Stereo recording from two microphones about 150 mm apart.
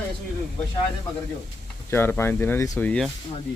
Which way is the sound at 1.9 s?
15° left (ahead or behind).